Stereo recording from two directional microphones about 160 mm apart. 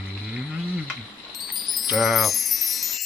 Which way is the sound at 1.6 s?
Centre (ahead or behind).